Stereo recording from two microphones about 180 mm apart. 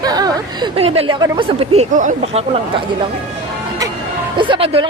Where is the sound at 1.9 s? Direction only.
45° right (ahead or behind).